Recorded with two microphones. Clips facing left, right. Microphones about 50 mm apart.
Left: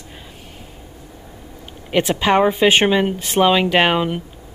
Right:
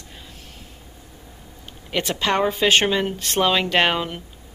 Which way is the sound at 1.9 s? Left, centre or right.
Centre.